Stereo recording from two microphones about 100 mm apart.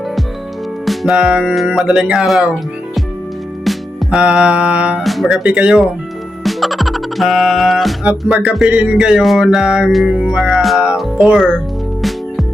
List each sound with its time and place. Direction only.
0.9 s music: 5° right (ahead or behind)
3.6 s music: centre (ahead or behind)
4.2 s mantra: 10° right (ahead or behind)
5.0 s music: centre (ahead or behind)